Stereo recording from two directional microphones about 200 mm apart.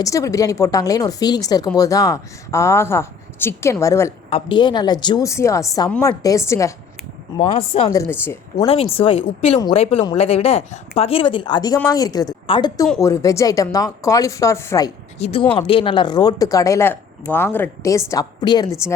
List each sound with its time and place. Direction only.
0.0 s speech: 15° left (ahead or behind)
4.3 s speech: 25° left (ahead or behind)
7.3 s speech: 30° left (ahead or behind)
7.9 s speech: 15° left (ahead or behind)
8.6 s speech: 30° left (ahead or behind)
15.2 s speech: 30° left (ahead or behind)